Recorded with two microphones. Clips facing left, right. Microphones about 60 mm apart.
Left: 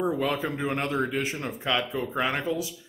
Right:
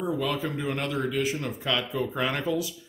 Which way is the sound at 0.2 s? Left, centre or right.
Left.